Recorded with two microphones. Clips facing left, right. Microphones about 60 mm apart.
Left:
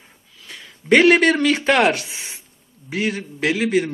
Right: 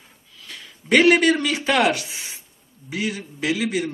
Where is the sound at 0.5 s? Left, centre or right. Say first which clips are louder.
Left 3 dB; left.